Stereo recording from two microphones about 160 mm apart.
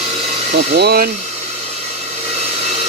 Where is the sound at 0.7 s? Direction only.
80° right.